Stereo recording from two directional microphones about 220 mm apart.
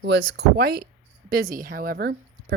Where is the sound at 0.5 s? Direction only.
45° right (ahead or behind).